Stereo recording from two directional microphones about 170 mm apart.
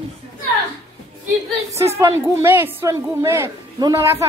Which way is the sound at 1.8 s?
15° right (ahead or behind).